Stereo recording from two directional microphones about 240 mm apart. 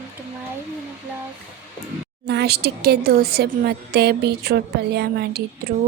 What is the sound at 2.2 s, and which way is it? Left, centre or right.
A woman's voice, right.